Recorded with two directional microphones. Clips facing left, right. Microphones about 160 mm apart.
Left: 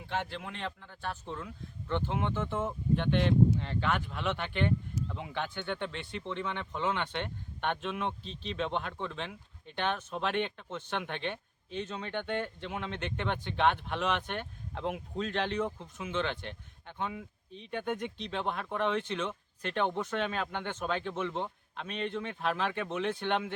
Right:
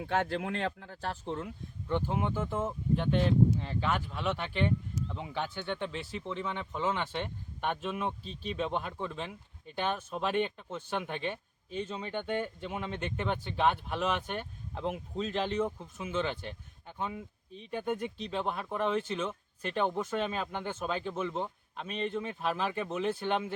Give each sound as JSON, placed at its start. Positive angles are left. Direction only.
{"t": 0.0, "sound": "speech", "side_deg": -50}
{"t": 0.9, "sound": "speech", "side_deg": -30}
{"t": 1.9, "sound": "speech", "side_deg": -10}